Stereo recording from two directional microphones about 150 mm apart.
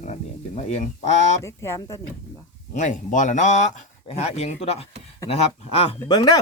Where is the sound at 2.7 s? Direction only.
55° left (ahead or behind).